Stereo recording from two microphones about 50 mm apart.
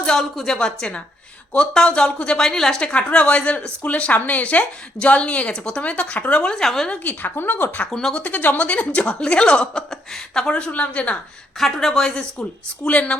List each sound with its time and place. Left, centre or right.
0.0 s a woman's voice: centre
2.4 s a woman's voice: centre; by 5.5 s left
5.5 s speech: centre
5.8 s a woman's voice: left
6.6 s speech: centre
7.0 s speech: left
7.9 s speech: centre
8.1 s a woman's voice: left; by 10.5 s centre
10.5 s a woman's voice: left
11.5 s speech: centre; by 13.1 s left